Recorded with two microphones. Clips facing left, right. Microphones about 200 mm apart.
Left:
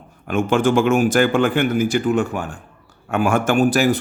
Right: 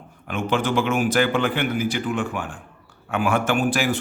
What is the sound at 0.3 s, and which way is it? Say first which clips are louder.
A man's voice: left 6 dB; 45° left (ahead or behind).